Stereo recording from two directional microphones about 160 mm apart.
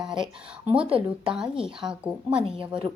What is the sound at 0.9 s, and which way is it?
Speech, 35° right (ahead or behind).